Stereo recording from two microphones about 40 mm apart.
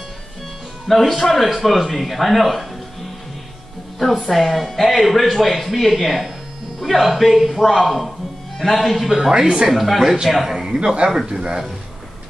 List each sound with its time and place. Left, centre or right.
0.8 s speech: centre
4.0 s speech: centre
9.3 s a man's voice: centre
9.7 s a man's voice: centre
11.2 s speech: right